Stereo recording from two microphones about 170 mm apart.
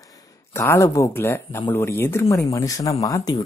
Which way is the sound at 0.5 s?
15° left (ahead or behind).